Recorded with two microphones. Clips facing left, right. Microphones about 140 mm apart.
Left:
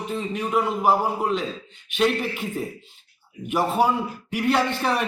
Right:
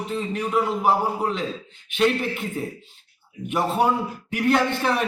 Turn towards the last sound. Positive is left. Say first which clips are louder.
# right 1 dB
turn(degrees=0)  # may be behind; listen again after turning